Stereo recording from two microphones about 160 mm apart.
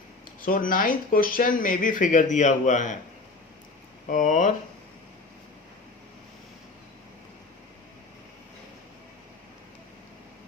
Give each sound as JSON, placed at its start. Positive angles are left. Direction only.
{"t": 0.4, "sound": "speech", "side_deg": 60}
{"t": 4.1, "sound": "speech", "side_deg": 50}